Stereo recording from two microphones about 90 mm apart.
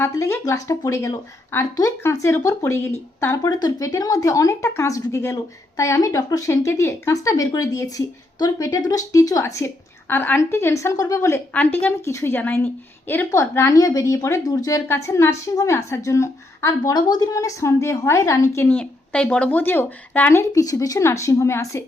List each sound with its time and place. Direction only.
0.1 s a woman's voice: 35° left (ahead or behind)
3.4 s speech: 45° left (ahead or behind)
10.1 s speech: 20° left (ahead or behind)
11.5 s speech: 15° left (ahead or behind)
12.0 s a woman's voice: 30° left (ahead or behind)
13.7 s speech: 40° left (ahead or behind)
16.9 s speech: 45° left (ahead or behind)
18.6 s speech: 15° left (ahead or behind)
20.3 s speech: 40° left (ahead or behind)